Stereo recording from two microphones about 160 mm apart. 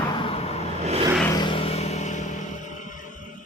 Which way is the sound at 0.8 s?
40° right (ahead or behind).